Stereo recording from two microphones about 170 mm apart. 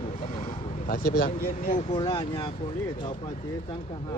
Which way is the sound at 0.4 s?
60° left (ahead or behind).